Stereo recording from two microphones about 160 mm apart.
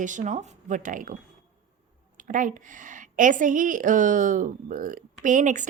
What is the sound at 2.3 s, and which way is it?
A woman's voice, 55° right (ahead or behind).